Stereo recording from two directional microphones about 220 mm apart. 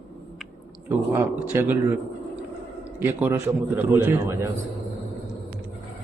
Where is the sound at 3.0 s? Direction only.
10° right (ahead or behind).